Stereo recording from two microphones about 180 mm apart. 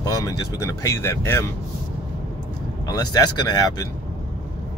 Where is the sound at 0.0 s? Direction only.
20° left (ahead or behind).